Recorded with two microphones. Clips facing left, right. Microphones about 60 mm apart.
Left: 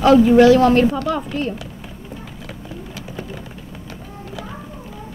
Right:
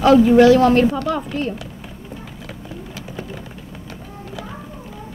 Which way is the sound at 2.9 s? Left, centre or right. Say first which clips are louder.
Even; right.